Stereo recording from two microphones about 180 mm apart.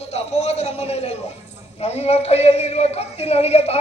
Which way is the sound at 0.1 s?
35° left (ahead or behind).